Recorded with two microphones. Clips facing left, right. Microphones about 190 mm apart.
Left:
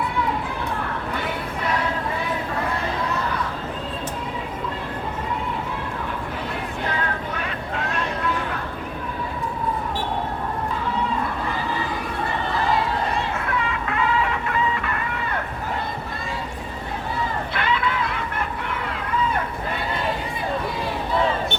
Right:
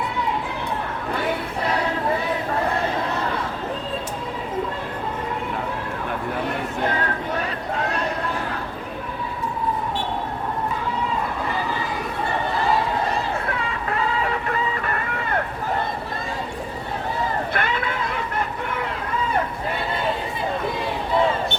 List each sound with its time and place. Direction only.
14.8 s vehicle: 45° right (ahead or behind)
17.5 s run: 50° right (ahead or behind)